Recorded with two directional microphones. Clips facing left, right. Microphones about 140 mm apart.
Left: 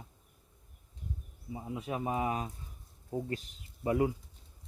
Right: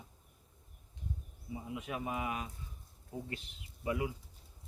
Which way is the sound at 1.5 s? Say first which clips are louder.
Left 3 dB; 35° left (ahead or behind).